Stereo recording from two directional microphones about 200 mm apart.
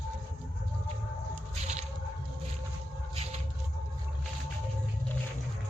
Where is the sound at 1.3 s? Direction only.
35° right (ahead or behind).